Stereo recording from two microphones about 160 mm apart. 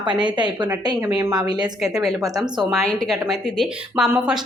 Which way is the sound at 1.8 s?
Centre (ahead or behind).